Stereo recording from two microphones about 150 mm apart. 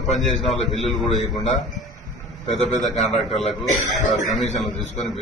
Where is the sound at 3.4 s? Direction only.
45° left (ahead or behind).